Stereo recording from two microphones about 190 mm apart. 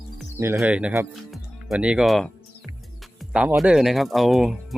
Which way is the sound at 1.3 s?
5° right (ahead or behind).